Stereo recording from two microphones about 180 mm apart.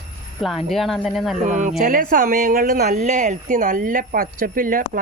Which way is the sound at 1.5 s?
40° right (ahead or behind).